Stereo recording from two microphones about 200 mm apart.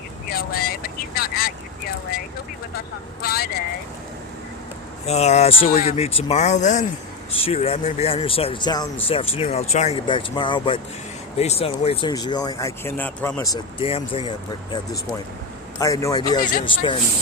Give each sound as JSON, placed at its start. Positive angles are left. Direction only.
{"t": 0.3, "sound": "vehicle", "side_deg": 50}
{"t": 3.2, "sound": "speech", "side_deg": 50}
{"t": 5.0, "sound": "speech", "side_deg": 35}
{"t": 5.6, "sound": "speech", "side_deg": 45}
{"t": 5.9, "sound": "speech", "side_deg": 30}
{"t": 15.8, "sound": "a man's voice", "side_deg": 15}